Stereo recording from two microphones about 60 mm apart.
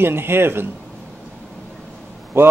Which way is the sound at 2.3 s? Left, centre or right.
Right.